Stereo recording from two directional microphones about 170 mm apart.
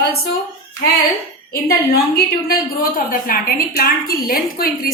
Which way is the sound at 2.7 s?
55° left (ahead or behind).